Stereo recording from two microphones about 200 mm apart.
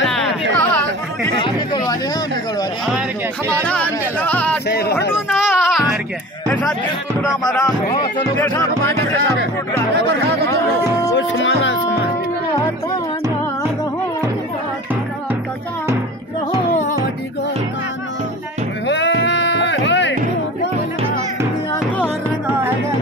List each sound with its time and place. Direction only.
0.0 s chatter: centre (ahead or behind)
1.4 s a sound: 20° left (ahead or behind)
3.6 s speech: 5° left (ahead or behind)
4.6 s speech: 55° left (ahead or behind)
5.1 s music: 5° right (ahead or behind)
8.4 s speech: 10° left (ahead or behind)
11.1 s music: 70° left (ahead or behind)
18.9 s sheep: 60° left (ahead or behind)